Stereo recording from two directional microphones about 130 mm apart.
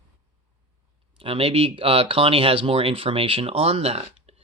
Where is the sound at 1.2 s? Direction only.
45° right (ahead or behind).